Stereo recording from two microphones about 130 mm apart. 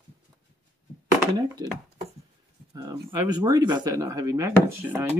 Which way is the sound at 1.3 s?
30° right (ahead or behind).